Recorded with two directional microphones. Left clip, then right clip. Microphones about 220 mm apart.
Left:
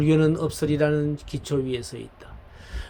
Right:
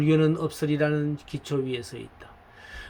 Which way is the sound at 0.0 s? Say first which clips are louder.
Left 2 dB; 15° left (ahead or behind).